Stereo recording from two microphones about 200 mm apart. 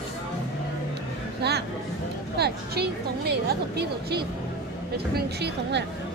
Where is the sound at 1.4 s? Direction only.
55° right (ahead or behind).